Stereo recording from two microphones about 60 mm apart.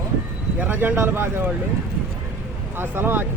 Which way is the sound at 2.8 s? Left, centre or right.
Right.